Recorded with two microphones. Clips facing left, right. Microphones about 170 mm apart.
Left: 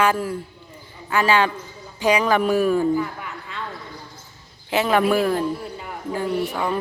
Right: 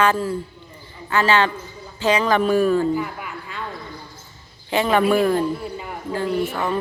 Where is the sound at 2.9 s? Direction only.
10° right (ahead or behind).